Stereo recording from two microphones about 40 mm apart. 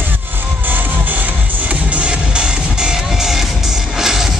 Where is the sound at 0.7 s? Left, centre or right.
Right.